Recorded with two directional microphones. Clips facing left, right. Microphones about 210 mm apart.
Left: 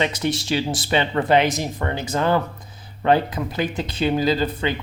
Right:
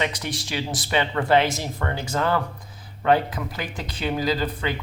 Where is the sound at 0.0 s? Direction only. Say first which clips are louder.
Left 5 dB; 25° left (ahead or behind).